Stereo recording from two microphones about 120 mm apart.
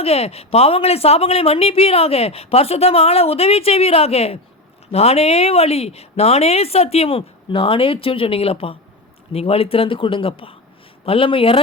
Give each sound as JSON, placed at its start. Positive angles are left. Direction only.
{"t": 0.0, "sound": "a man's voice", "side_deg": 55}